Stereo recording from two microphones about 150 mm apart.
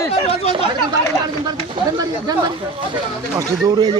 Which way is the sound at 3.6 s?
25° right (ahead or behind).